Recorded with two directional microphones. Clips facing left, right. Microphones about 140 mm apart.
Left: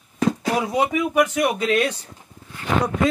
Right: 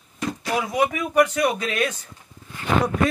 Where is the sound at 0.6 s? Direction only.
25° left (ahead or behind).